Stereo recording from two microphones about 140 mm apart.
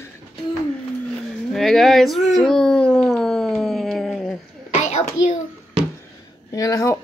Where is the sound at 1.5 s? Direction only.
Centre (ahead or behind).